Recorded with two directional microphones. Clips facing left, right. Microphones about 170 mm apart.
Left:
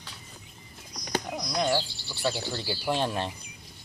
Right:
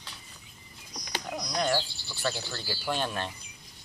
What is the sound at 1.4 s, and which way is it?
Bird, 10° left (ahead or behind).